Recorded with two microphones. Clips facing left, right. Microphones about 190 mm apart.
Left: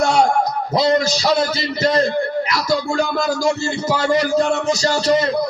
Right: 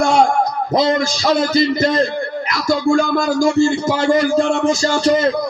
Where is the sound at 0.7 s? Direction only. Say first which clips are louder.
Even; 45° right (ahead or behind).